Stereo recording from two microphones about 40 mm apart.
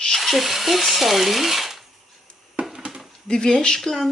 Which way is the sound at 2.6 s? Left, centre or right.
Right.